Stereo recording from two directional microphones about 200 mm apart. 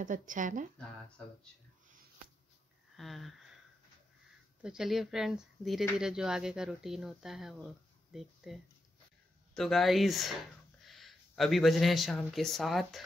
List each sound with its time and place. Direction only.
0.0 s speech: 40° right (ahead or behind)
0.7 s speech: 5° left (ahead or behind)
3.0 s a sound: centre (ahead or behind)
4.6 s speech: centre (ahead or behind)